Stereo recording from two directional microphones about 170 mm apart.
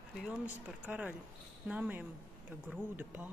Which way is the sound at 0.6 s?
10° right (ahead or behind).